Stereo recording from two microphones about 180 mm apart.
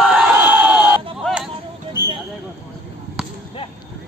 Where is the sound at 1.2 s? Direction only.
Centre (ahead or behind).